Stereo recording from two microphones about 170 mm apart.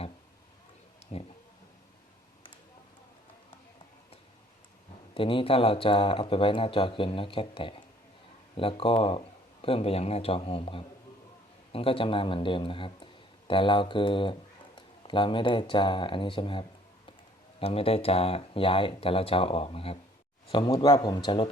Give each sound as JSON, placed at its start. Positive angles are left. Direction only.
{"t": 5.1, "sound": "speech", "side_deg": 30}